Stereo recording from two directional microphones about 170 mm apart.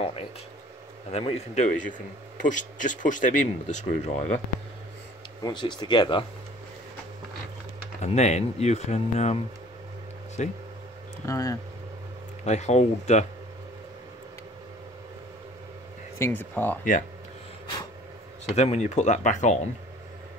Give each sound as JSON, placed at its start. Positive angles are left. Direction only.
{"t": 1.1, "sound": "speech", "side_deg": 35}
{"t": 5.4, "sound": "speech", "side_deg": 25}
{"t": 8.0, "sound": "speech", "side_deg": 40}
{"t": 11.2, "sound": "speech", "side_deg": 20}
{"t": 12.4, "sound": "speech", "side_deg": 40}
{"t": 16.2, "sound": "speech", "side_deg": 10}
{"t": 18.4, "sound": "speech", "side_deg": 40}